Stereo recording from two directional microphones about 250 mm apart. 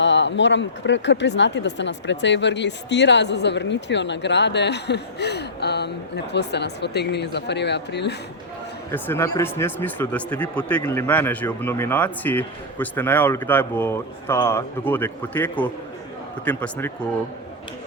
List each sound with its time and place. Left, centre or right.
0.0 s speech: left
8.9 s speech: centre